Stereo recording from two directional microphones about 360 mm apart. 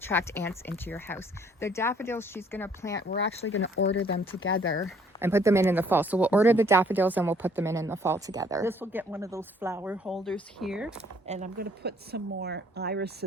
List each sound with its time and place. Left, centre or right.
0.1 s speech: centre
3.1 s speech: left
5.2 s speech: centre
11.3 s speech: centre